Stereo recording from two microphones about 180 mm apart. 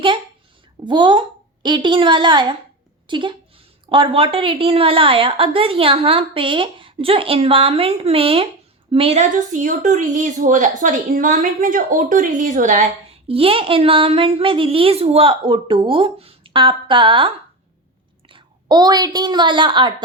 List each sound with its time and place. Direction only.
0.9 s a woman's voice: 25° right (ahead or behind)